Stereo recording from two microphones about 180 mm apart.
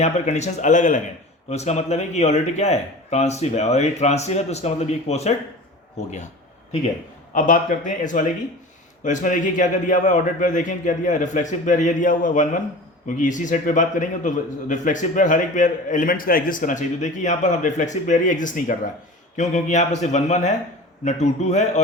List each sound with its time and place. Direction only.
0.0 s a man's voice: 40° left (ahead or behind)
7.3 s a man's voice: 45° left (ahead or behind)